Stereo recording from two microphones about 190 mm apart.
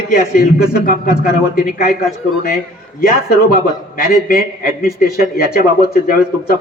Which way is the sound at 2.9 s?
50° left (ahead or behind).